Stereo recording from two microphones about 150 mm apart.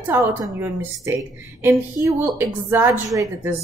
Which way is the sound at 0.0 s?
15° right (ahead or behind).